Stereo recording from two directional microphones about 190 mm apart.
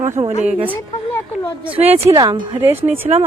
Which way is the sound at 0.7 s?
10° left (ahead or behind).